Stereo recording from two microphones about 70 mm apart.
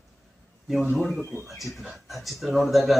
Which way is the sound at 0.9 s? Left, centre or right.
Centre.